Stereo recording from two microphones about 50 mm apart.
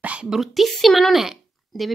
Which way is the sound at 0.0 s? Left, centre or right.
Right.